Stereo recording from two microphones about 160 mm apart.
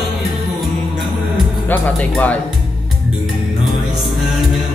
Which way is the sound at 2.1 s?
10° left (ahead or behind).